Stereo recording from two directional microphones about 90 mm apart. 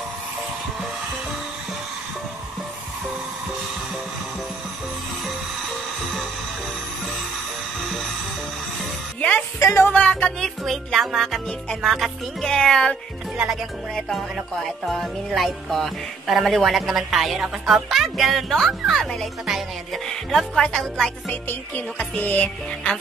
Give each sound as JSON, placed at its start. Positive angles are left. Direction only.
{"t": 9.6, "sound": "music", "side_deg": 35}
{"t": 9.8, "sound": "music", "side_deg": 15}
{"t": 10.6, "sound": "music", "side_deg": 0}
{"t": 13.9, "sound": "music", "side_deg": 5}
{"t": 21.3, "sound": "music", "side_deg": 20}